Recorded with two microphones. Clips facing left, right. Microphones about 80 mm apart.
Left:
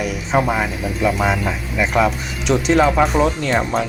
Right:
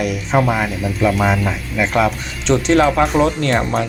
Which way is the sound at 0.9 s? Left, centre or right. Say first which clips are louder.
Right 2 dB; centre.